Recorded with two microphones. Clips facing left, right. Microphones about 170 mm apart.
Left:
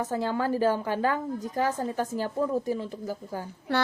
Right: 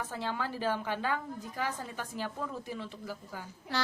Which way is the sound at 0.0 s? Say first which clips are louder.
Left 8 dB; 45° left (ahead or behind).